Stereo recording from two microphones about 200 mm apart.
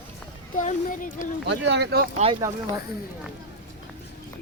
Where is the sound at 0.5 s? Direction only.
40° left (ahead or behind).